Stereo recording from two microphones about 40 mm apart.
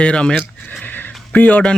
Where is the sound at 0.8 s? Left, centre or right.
Left.